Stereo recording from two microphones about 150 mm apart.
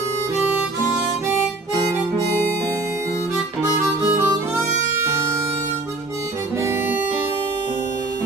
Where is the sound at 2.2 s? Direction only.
15° left (ahead or behind).